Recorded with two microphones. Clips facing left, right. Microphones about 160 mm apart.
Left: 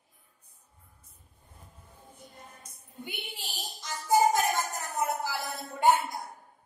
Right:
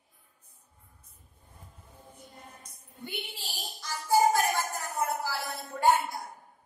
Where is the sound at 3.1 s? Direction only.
20° left (ahead or behind).